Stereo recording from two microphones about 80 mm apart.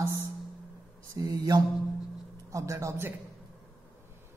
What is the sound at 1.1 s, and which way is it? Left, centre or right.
Mantra, right.